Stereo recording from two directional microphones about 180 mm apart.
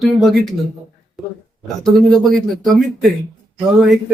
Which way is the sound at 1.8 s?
Centre (ahead or behind).